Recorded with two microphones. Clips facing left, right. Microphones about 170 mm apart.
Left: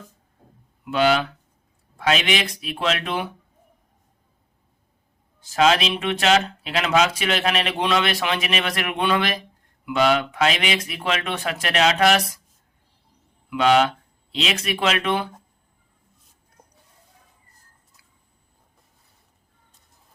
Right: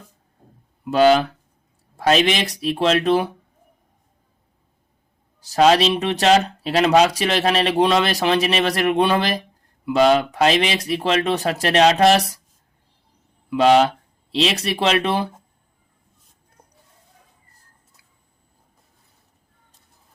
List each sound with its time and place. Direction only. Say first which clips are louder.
0.9 s speech: right 5 dB; 40° right (ahead or behind)
5.5 s speech: right 4 dB; 40° right (ahead or behind)
13.5 s speech: right 3 dB; 35° right (ahead or behind)